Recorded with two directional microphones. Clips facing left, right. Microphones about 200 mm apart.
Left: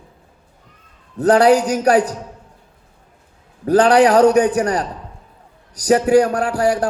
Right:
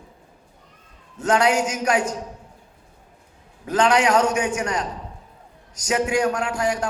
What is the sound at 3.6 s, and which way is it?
Speech, 35° left (ahead or behind).